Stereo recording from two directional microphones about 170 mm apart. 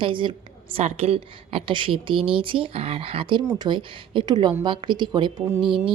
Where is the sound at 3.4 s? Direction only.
15° right (ahead or behind).